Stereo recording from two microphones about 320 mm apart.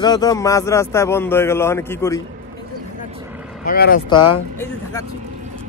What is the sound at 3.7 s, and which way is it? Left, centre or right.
Speech, left.